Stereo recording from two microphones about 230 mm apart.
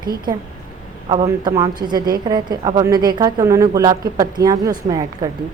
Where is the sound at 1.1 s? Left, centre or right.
Centre.